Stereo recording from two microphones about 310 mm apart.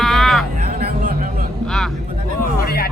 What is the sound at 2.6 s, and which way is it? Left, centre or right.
Music, left.